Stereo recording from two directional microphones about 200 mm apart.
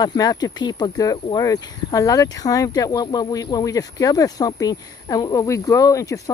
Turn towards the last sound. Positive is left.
turn(degrees=15)  # may be behind; listen again after turning